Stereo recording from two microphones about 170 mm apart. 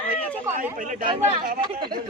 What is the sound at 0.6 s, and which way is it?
Speech, 50° right (ahead or behind).